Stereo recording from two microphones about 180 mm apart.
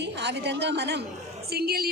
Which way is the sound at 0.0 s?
70° right (ahead or behind).